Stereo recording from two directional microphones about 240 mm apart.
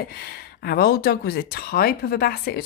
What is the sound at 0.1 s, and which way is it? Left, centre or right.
Speech, left.